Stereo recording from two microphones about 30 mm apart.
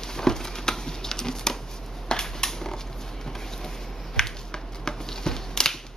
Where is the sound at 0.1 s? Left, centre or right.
Centre.